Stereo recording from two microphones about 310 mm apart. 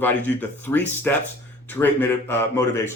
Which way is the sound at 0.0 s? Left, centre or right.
Centre.